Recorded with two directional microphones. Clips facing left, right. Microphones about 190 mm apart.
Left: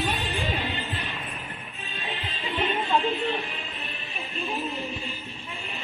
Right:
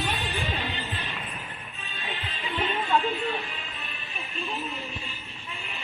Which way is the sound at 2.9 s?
20° left (ahead or behind).